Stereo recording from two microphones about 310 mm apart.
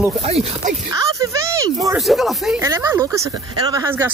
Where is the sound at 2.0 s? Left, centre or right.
Centre.